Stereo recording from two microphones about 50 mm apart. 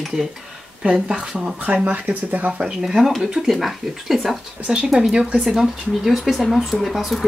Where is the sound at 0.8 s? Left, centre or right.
Centre.